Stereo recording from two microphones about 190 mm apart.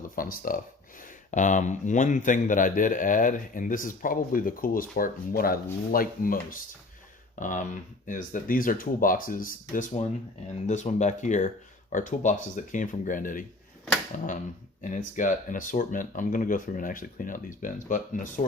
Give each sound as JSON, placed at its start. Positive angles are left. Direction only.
{"t": 0.2, "sound": "a man's voice", "side_deg": 45}